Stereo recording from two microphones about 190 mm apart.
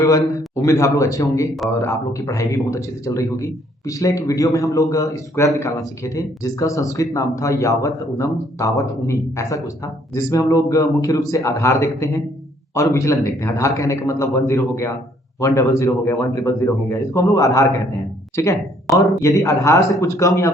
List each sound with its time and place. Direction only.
0.0 s speech: 15° left (ahead or behind)